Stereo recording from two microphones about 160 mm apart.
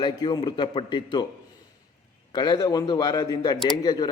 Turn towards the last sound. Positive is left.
turn(degrees=25)  # may be behind; listen again after turning